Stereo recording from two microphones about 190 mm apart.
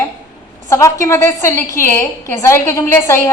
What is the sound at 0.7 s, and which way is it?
A woman's voice, 15° left (ahead or behind).